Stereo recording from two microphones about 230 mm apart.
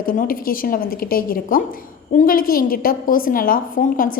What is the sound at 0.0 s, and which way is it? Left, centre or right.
A woman's voice, left.